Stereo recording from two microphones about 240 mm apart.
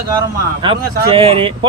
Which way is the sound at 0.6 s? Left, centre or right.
Right.